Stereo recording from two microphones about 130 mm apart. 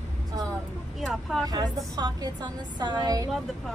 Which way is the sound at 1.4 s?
30° right (ahead or behind).